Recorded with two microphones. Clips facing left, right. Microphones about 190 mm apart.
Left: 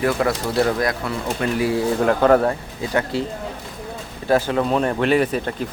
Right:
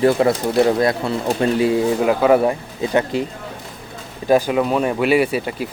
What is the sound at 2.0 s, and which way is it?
Speech, 5° right (ahead or behind).